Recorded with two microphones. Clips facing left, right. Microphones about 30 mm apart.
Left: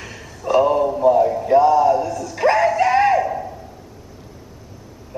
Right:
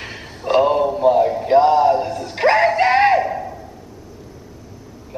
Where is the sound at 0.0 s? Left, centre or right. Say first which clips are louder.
Right 1 dB; right.